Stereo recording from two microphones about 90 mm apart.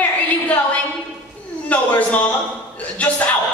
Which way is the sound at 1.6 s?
15° left (ahead or behind).